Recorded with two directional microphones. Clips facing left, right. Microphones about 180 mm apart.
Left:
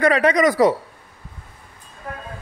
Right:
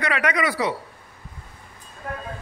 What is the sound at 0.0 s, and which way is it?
Speech, 35° left (ahead or behind).